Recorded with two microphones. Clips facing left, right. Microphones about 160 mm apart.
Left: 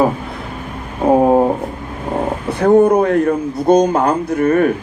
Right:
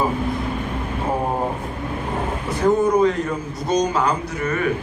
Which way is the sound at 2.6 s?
60° left (ahead or behind).